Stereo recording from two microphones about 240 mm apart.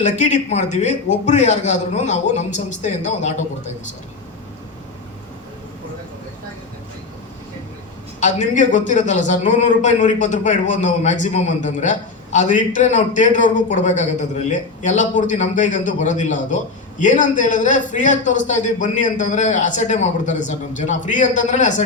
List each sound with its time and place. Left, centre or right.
0.0 s a man's voice: left
8.2 s a man's voice: left